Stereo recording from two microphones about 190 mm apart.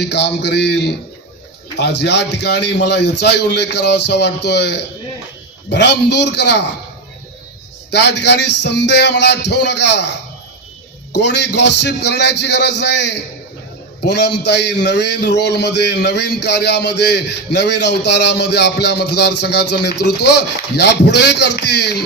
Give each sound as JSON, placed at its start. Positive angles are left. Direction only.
{"t": 0.0, "sound": "a man's voice", "side_deg": 60}
{"t": 7.9, "sound": "a man's voice", "side_deg": 60}
{"t": 11.2, "sound": "a man's voice", "side_deg": 65}